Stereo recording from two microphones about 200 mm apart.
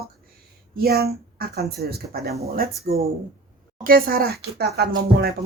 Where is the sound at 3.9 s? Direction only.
50° right (ahead or behind).